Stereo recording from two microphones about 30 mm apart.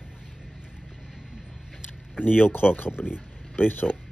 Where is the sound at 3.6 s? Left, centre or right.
Left.